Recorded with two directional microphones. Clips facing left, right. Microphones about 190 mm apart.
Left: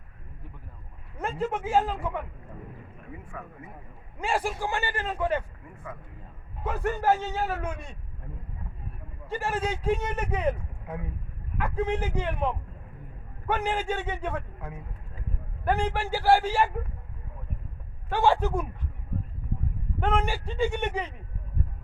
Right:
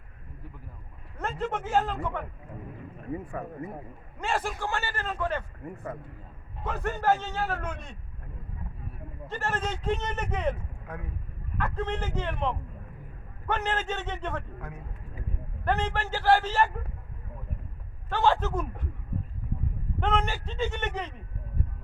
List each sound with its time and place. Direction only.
1.2 s speech: 10° left (ahead or behind)
3.1 s speech: 40° right (ahead or behind)
4.2 s speech: 10° left (ahead or behind)
6.7 s speech: 10° left (ahead or behind)
9.3 s speech: 10° left (ahead or behind)
18.1 s speech: 10° left (ahead or behind)
20.0 s speech: 10° left (ahead or behind)